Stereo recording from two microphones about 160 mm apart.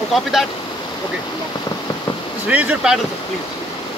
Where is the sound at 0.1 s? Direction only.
Centre (ahead or behind).